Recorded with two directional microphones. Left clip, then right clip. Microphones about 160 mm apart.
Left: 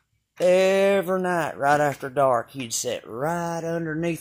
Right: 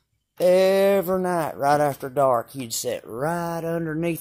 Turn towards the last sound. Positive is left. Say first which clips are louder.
# right 1 dB
turn(degrees=-5)  # may be behind; listen again after turning